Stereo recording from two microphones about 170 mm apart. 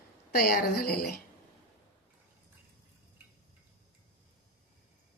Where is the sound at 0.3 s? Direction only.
60° left (ahead or behind).